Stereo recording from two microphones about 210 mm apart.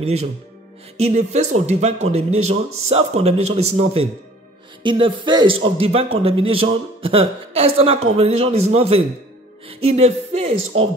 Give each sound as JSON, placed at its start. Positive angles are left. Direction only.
{"t": 0.0, "sound": "a man's voice", "side_deg": -30}